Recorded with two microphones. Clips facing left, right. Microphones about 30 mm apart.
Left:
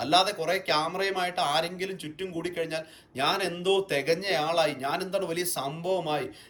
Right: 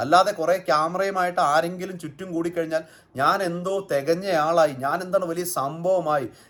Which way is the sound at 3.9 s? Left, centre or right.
Left.